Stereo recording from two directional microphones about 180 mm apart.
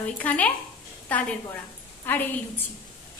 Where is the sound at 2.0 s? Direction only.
10° left (ahead or behind).